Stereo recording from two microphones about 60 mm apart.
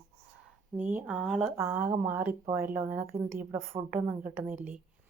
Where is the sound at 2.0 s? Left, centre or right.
Right.